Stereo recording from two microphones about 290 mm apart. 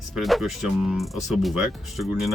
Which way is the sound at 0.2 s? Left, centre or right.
Centre.